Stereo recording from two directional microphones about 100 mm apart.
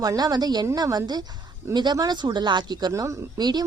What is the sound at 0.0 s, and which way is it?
A woman's voice, 40° right (ahead or behind).